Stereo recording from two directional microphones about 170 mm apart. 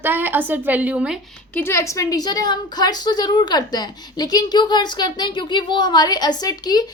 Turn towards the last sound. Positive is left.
turn(degrees=25)  # may be behind; listen again after turning